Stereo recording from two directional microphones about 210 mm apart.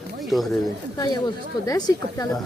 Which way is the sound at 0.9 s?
20° left (ahead or behind).